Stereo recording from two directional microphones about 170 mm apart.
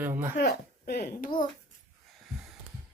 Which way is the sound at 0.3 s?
70° left (ahead or behind).